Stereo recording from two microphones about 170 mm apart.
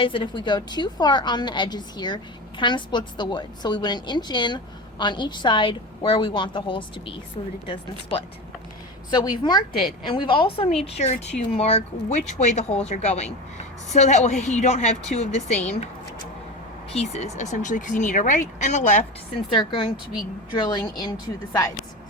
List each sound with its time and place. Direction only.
0.0 s a woman's voice: 30° left (ahead or behind)
9.0 s a woman's voice: 25° left (ahead or behind)
16.9 s speech: 40° left (ahead or behind)
19.5 s a woman's voice: 30° left (ahead or behind)